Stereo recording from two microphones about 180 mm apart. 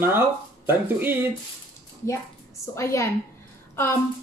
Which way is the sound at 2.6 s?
15° left (ahead or behind).